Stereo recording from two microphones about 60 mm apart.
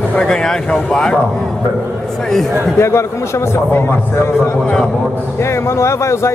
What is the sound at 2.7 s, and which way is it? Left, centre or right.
Speech, left.